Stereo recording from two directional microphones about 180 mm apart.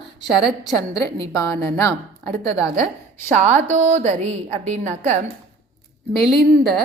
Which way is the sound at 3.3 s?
40° right (ahead or behind).